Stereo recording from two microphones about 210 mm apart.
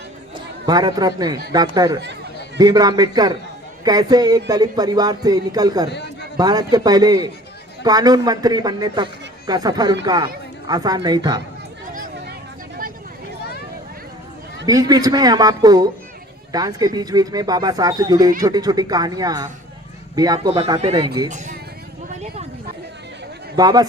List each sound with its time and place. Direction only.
0.3 s a man's voice: 20° right (ahead or behind)
11.9 s a sound: 40° right (ahead or behind)
14.7 s a man's voice: 20° right (ahead or behind)
21.2 s speech: 35° right (ahead or behind)
22.1 s a sound: 30° right (ahead or behind)
23.6 s a man's voice: 20° right (ahead or behind)